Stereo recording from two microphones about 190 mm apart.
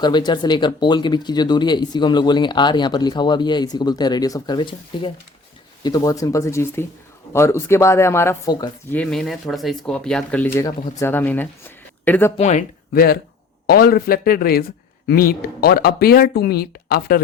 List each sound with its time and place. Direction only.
0.0 s speech: 25° left (ahead or behind)
8.9 s speech: 5° left (ahead or behind)
12.4 s speech: 40° left (ahead or behind); by 17.2 s 55° left (ahead or behind)